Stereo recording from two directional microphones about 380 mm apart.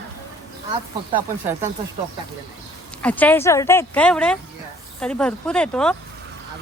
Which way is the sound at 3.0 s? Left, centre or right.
Centre.